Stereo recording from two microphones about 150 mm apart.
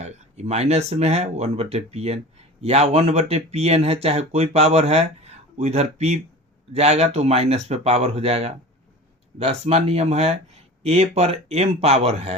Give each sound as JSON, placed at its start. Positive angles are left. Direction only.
{"t": 0.0, "sound": "speech", "side_deg": -45}